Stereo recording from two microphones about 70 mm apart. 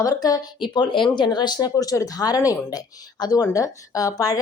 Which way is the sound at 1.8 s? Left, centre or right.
Left.